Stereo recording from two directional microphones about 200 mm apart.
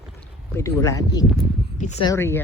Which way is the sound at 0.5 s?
15° left (ahead or behind).